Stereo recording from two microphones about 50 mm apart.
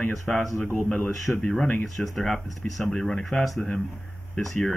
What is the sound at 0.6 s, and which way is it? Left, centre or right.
Speech, centre.